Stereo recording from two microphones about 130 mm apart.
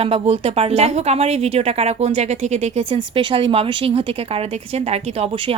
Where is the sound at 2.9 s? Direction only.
40° right (ahead or behind).